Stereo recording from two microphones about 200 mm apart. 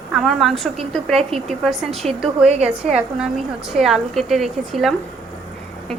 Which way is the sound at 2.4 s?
30° right (ahead or behind).